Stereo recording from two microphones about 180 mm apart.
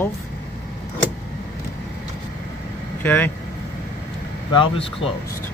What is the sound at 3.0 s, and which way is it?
Speech, 10° left (ahead or behind).